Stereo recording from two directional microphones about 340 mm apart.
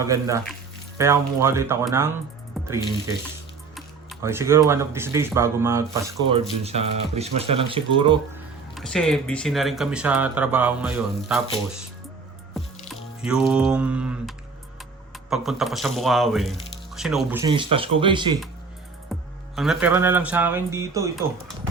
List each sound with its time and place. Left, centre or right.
0.0 s speech: centre
8.7 s speech: centre
12.9 s a sound: centre
15.3 s speech: centre
19.5 s speech: centre